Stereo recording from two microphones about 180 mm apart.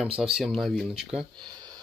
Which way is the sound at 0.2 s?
Centre (ahead or behind).